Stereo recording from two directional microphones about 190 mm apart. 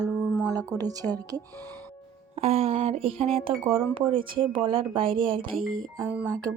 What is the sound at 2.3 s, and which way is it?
Speech, 35° right (ahead or behind).